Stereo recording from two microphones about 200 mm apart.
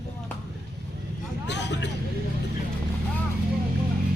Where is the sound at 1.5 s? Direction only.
60° left (ahead or behind).